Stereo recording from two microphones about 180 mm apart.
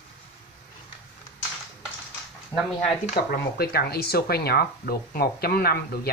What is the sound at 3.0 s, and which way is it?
Speech, 50° left (ahead or behind).